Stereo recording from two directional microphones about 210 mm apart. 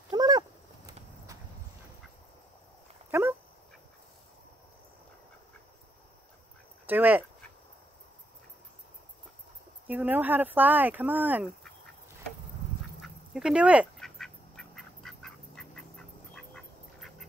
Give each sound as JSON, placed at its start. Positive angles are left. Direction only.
{"t": 0.1, "sound": "a sound", "side_deg": -20}
{"t": 3.1, "sound": "dog", "side_deg": -10}
{"t": 6.9, "sound": "speech", "side_deg": -10}
{"t": 9.8, "sound": "speech", "side_deg": -10}
{"t": 13.0, "sound": "duck", "side_deg": -5}